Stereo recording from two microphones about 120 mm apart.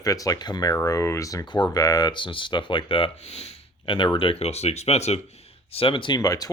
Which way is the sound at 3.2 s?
60° left (ahead or behind).